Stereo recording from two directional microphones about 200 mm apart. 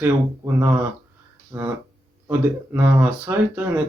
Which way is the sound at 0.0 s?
10° right (ahead or behind).